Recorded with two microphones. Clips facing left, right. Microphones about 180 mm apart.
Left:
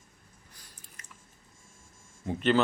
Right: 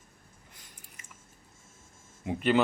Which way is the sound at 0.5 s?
20° right (ahead or behind).